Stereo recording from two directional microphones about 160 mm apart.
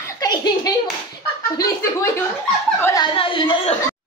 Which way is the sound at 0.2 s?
25° left (ahead or behind).